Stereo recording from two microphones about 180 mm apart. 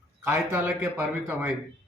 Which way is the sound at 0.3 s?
10° right (ahead or behind).